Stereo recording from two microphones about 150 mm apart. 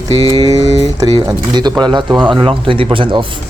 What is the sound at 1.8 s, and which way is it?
Speech, 30° right (ahead or behind).